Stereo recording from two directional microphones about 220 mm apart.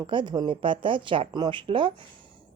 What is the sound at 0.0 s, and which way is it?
A woman's voice, 20° right (ahead or behind).